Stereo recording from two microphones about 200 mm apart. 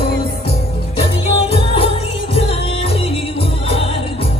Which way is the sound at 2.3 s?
30° left (ahead or behind).